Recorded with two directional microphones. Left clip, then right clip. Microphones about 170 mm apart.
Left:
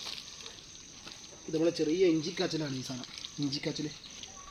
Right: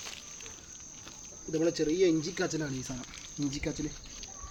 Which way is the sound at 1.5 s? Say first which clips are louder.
Even; 10° right (ahead or behind).